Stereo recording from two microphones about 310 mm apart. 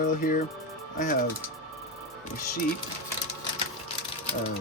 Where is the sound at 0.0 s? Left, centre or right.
Left.